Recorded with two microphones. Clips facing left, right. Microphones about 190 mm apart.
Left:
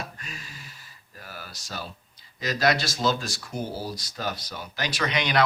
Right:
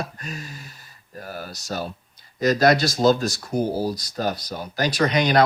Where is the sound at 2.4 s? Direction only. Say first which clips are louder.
Right 7 dB; 45° right (ahead or behind).